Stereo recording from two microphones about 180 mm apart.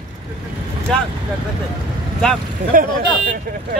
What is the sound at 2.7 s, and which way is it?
Speech, 50° right (ahead or behind).